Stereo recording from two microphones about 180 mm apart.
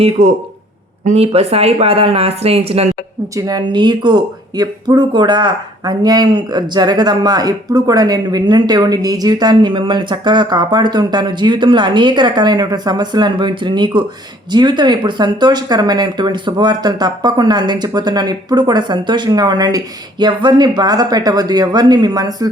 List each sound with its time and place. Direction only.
0.0 s speech: 35° right (ahead or behind)
3.3 s speech: 20° right (ahead or behind)